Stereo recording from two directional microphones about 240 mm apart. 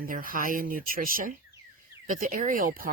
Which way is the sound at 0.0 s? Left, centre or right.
Right.